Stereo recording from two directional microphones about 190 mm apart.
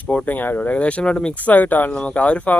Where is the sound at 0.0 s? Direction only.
5° left (ahead or behind).